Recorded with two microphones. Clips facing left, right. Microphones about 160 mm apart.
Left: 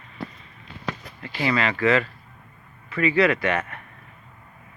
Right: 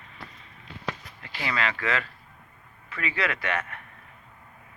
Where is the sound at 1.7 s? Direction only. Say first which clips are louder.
Left 9 dB; 10° left (ahead or behind).